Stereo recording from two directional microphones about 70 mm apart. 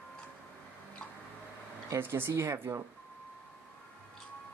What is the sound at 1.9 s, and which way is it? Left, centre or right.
Speech, right.